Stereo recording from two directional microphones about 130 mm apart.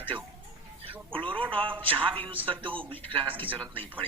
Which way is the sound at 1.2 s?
40° right (ahead or behind).